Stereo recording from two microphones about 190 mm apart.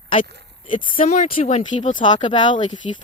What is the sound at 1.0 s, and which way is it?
Speech, 35° left (ahead or behind).